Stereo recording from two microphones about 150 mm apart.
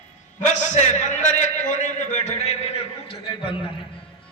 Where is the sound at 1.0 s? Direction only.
55° left (ahead or behind).